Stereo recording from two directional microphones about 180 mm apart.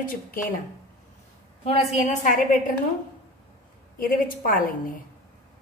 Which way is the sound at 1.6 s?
45° left (ahead or behind).